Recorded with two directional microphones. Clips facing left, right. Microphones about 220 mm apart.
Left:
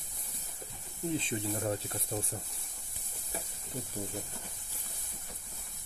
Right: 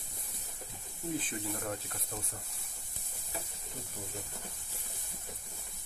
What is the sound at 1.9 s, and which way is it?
Speech, 30° left (ahead or behind).